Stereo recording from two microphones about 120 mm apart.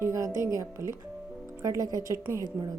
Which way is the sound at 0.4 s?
25° right (ahead or behind).